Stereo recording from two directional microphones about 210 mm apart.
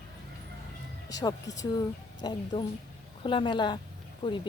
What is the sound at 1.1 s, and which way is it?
Speech, 15° left (ahead or behind).